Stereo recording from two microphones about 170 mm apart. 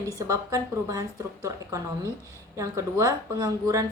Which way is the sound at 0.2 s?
20° right (ahead or behind).